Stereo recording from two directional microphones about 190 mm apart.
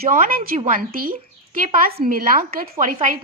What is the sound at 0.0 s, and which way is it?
A woman's voice, 45° right (ahead or behind).